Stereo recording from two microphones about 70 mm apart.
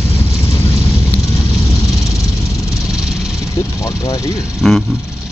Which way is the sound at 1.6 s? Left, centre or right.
Left.